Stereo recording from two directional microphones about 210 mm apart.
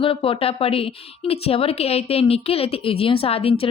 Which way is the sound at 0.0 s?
25° left (ahead or behind).